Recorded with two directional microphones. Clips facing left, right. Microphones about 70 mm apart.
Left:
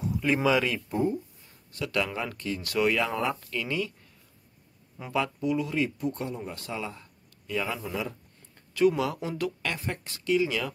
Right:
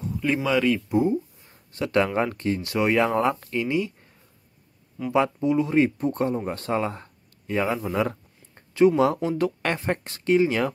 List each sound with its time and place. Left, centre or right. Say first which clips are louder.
0.0 s speech: even; centre
0.9 s speech: right 4 dB; centre
1.8 s speech: right 8 dB; right
3.5 s speech: right 6 dB; right
5.1 s speech: right 6 dB; right
7.4 s speech: right 6 dB; right
7.9 s speech: right 8 dB; right
8.5 s speech: right 5 dB; right